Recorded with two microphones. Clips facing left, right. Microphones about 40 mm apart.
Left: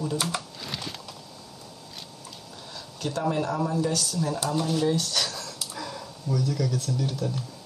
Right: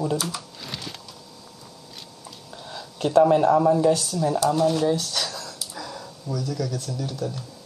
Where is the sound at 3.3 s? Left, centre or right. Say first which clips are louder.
Right 9 dB; centre.